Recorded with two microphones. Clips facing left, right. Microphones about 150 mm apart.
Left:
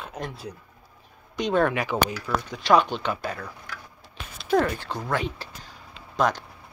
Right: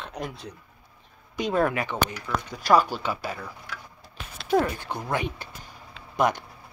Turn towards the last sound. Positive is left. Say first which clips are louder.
# even
turn(degrees=-15)  # may be behind; listen again after turning